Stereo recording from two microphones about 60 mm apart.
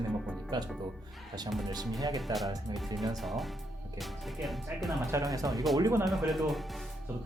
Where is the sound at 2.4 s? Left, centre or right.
Right.